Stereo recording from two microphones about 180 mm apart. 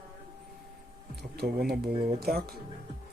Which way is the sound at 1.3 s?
60° right (ahead or behind).